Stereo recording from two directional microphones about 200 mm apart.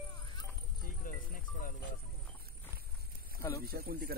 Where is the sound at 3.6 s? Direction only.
50° right (ahead or behind).